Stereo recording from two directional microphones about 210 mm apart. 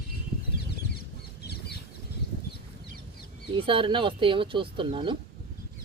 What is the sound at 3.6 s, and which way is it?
Speech, 25° right (ahead or behind).